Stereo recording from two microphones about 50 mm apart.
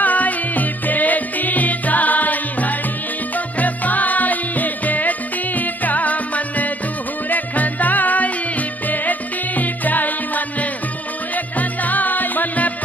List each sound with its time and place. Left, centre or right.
0.0 s music: left
9.6 s music: left